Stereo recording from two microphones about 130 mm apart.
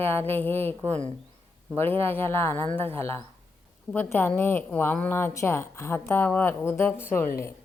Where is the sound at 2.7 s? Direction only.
45° right (ahead or behind).